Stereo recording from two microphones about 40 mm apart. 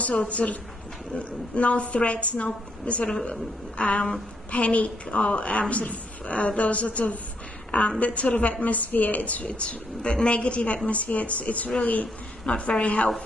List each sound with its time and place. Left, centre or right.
0.0 s a woman's voice: left
9.5 s a woman's voice: left